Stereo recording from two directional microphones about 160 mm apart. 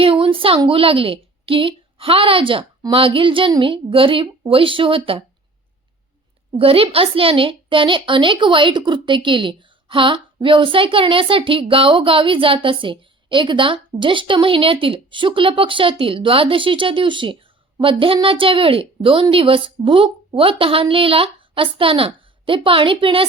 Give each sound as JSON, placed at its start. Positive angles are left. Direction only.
{"t": 0.0, "sound": "a woman's voice", "side_deg": -35}
{"t": 6.6, "sound": "a woman's voice", "side_deg": -35}